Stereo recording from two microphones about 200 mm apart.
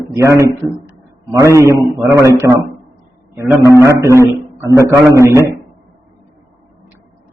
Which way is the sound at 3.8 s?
15° right (ahead or behind).